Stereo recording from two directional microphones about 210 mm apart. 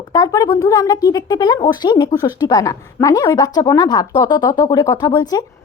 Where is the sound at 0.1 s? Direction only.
20° left (ahead or behind).